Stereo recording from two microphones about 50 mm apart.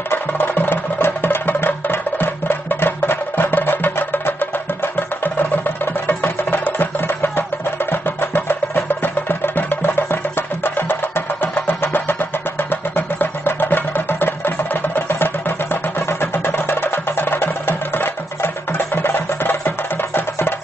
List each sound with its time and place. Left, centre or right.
0.3 s music: left